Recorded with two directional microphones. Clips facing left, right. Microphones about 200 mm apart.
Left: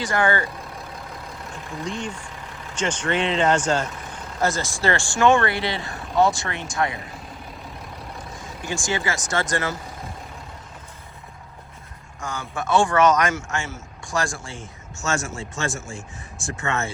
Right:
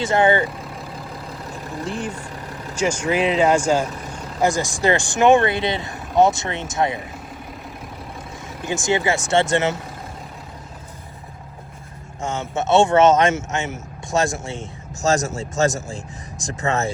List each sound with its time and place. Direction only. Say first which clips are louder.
0.0 s speech: right 5 dB; 25° right (ahead or behind)
1.8 s speech: right 2 dB; 5° right (ahead or behind); by 7.0 s 20° right (ahead or behind)
8.6 s speech: right 6 dB; 20° right (ahead or behind)
12.2 s speech: right 6 dB; 25° right (ahead or behind)
15.0 s speech: right 7 dB; 35° right (ahead or behind)